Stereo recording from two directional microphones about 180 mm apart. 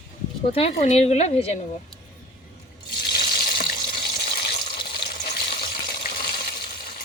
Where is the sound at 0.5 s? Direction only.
35° left (ahead or behind).